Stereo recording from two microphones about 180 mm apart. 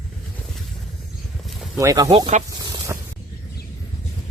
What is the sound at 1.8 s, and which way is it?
Speech, 20° right (ahead or behind).